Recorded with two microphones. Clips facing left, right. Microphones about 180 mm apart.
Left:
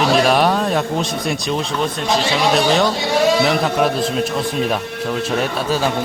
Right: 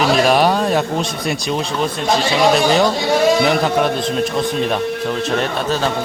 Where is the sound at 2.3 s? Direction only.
Centre (ahead or behind).